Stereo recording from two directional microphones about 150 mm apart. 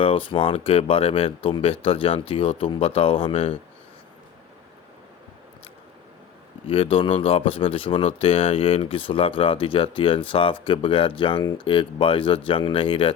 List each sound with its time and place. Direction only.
0.0 s speech: 35° left (ahead or behind)
6.9 s speech: 35° left (ahead or behind)